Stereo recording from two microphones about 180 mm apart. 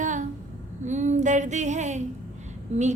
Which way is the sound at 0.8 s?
40° right (ahead or behind).